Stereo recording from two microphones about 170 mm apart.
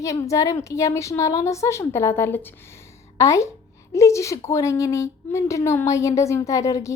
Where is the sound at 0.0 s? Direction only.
20° left (ahead or behind).